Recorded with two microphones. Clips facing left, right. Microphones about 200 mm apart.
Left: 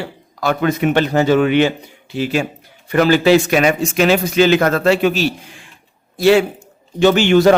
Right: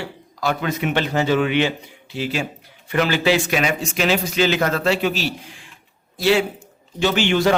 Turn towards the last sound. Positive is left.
turn(degrees=45)  # may be behind; listen again after turning